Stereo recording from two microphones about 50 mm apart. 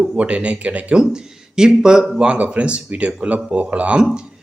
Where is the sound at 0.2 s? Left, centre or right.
Right.